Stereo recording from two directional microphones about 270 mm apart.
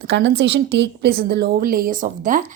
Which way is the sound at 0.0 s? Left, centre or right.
Right.